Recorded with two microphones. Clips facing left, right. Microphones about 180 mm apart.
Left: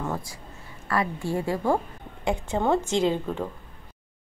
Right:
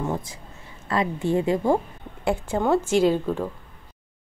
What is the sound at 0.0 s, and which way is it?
A woman's voice, 20° right (ahead or behind).